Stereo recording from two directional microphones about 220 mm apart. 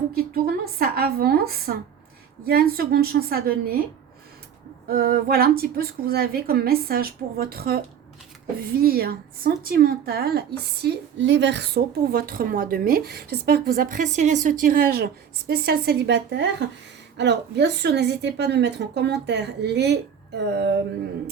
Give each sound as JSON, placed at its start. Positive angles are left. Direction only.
{"t": 0.2, "sound": "a woman's voice", "side_deg": -45}
{"t": 4.9, "sound": "a woman's voice", "side_deg": -45}